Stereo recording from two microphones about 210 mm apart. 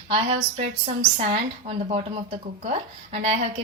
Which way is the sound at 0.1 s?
25° right (ahead or behind).